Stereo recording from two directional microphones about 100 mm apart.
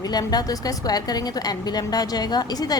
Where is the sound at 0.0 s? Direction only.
40° left (ahead or behind).